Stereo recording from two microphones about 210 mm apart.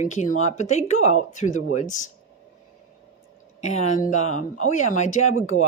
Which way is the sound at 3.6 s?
30° left (ahead or behind).